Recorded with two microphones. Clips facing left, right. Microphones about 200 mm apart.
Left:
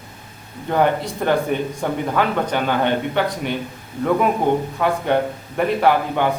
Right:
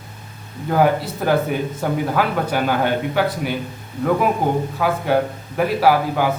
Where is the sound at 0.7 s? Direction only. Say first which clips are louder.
Right 1 dB; 5° right (ahead or behind).